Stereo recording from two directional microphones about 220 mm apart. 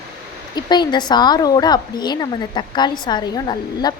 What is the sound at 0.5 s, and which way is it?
A woman's voice, 20° left (ahead or behind).